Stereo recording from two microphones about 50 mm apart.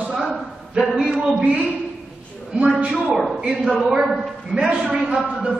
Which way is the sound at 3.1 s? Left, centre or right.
Centre.